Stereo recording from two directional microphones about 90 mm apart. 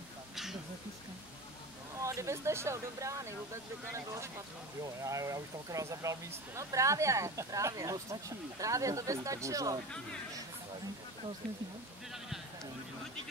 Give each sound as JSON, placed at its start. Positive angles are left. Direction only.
{"t": 2.0, "sound": "speech", "side_deg": -35}